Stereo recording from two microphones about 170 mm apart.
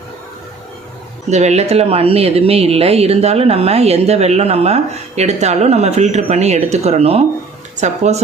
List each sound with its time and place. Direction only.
1.3 s speech: 40° right (ahead or behind)